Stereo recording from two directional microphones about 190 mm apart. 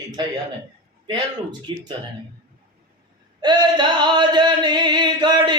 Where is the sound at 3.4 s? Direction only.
25° right (ahead or behind).